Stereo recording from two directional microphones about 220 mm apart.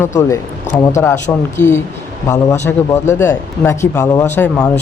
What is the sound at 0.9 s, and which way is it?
A man's voice, 10° left (ahead or behind).